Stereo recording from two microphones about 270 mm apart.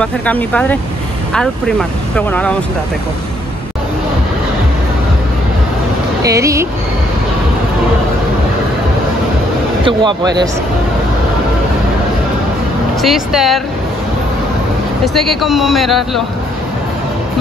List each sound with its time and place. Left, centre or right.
0.0 s speech: centre
6.2 s speech: centre
9.8 s speech: centre
13.0 s speech: centre
15.1 s speech: centre